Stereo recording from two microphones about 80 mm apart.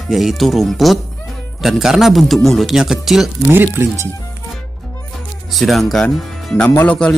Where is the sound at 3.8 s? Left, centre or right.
Right.